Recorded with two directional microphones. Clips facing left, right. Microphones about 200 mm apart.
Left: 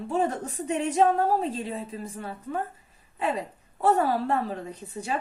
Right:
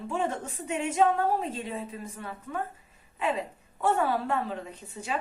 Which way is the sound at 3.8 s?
35° left (ahead or behind).